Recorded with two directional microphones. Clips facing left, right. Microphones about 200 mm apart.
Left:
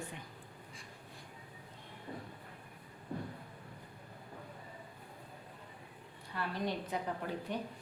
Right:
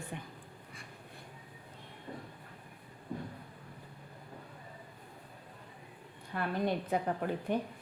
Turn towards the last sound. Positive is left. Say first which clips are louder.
# right 5 dB
turn(degrees=-55)  # may be behind; listen again after turning